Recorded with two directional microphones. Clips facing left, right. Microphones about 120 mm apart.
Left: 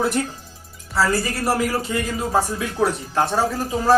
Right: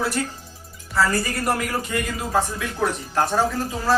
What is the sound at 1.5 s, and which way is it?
Speech, 25° left (ahead or behind).